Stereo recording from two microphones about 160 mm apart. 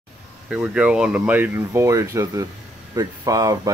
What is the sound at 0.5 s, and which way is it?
Speech, 5° right (ahead or behind).